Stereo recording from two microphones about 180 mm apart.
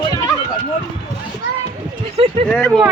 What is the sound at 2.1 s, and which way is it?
Speech, 35° right (ahead or behind).